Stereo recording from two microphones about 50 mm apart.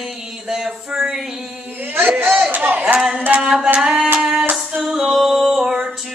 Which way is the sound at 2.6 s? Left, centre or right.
Right.